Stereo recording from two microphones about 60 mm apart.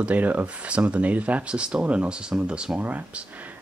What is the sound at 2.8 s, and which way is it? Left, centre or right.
Speech, right.